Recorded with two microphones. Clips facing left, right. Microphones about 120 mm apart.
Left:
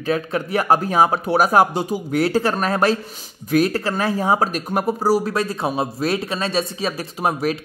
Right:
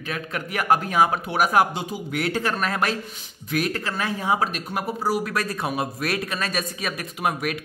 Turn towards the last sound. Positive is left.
turn(degrees=30)  # may be behind; listen again after turning